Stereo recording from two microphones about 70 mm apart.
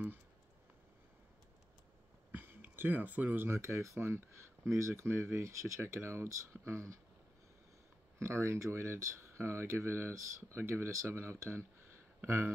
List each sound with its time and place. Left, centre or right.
2.3 s speech: right
8.2 s speech: right